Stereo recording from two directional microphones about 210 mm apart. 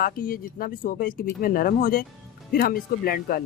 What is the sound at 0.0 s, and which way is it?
Speech, 45° left (ahead or behind).